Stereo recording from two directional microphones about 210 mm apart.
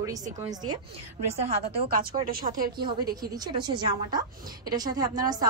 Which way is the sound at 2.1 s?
25° right (ahead or behind).